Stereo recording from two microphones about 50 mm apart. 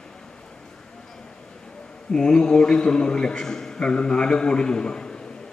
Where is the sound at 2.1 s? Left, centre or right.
Centre.